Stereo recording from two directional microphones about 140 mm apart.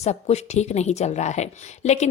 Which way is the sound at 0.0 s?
50° left (ahead or behind).